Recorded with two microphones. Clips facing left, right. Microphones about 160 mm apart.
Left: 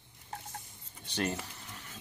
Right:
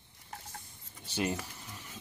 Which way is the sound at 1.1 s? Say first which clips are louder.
Right 1 dB; 10° right (ahead or behind).